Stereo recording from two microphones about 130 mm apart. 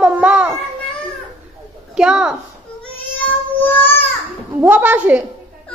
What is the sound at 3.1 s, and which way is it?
Child singing, 15° left (ahead or behind).